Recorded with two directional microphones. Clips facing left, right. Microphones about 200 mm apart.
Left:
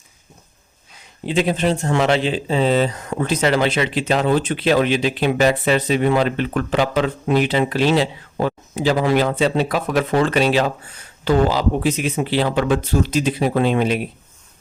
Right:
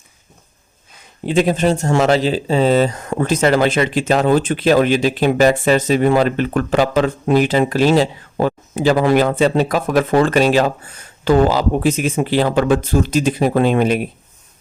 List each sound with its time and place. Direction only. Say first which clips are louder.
1.2 s speech: right 4 dB; 45° right (ahead or behind)